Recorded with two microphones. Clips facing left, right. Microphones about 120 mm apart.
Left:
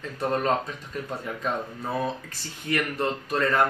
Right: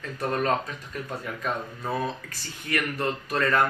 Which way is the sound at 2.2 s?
20° left (ahead or behind).